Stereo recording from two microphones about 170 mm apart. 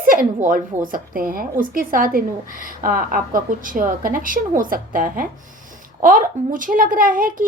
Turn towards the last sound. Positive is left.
turn(degrees=-55)  # may be behind; listen again after turning